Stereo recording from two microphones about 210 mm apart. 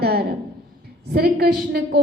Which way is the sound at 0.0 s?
50° right (ahead or behind).